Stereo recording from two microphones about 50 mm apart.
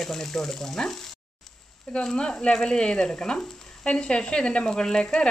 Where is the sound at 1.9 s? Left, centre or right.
Centre.